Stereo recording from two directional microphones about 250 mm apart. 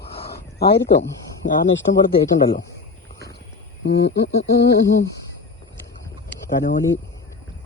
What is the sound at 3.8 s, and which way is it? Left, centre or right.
Speech, left.